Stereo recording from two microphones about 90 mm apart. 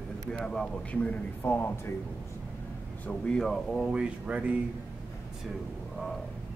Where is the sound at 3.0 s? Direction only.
5° left (ahead or behind).